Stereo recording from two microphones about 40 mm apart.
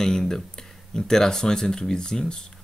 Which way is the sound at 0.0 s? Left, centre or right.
Centre.